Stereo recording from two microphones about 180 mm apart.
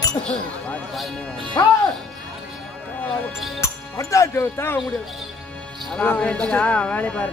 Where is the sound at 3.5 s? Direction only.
15° left (ahead or behind).